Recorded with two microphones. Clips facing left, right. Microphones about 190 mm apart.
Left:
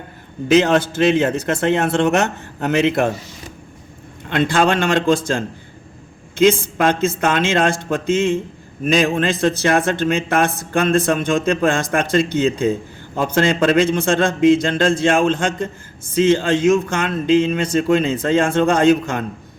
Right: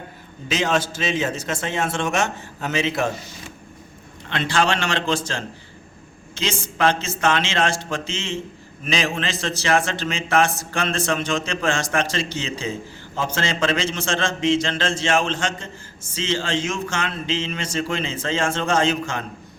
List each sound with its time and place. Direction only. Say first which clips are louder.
0.4 s a man's voice: left 8 dB; 60° left (ahead or behind)
4.3 s a man's voice: left 5 dB; 50° left (ahead or behind)